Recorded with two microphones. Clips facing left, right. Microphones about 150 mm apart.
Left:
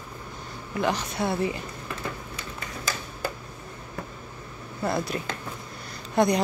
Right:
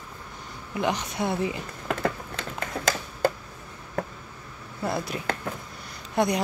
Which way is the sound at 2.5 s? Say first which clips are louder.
Right 7 dB; 90° right.